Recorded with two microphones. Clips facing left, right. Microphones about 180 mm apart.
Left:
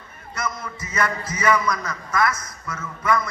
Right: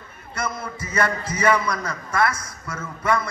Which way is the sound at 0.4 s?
30° right (ahead or behind).